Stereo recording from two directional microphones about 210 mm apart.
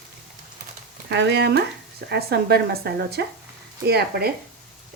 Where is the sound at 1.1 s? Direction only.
55° right (ahead or behind).